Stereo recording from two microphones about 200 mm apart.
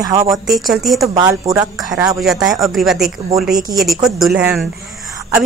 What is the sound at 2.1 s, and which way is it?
A woman's voice, centre (ahead or behind).